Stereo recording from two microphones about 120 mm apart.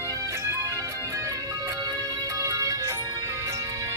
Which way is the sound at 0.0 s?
25° right (ahead or behind).